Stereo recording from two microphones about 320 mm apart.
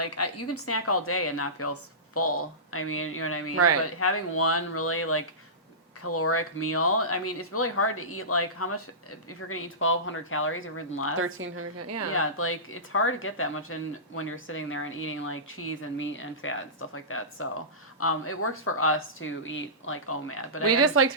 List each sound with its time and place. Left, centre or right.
0.0 s speech: left
3.5 s speech: right
4.0 s speech: left
11.2 s speech: right
12.1 s speech: left
20.7 s speech: right